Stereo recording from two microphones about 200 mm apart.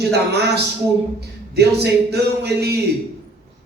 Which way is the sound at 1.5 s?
55° right (ahead or behind).